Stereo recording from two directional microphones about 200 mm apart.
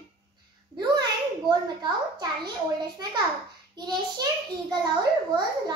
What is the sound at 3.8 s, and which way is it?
A child's voice, 20° right (ahead or behind).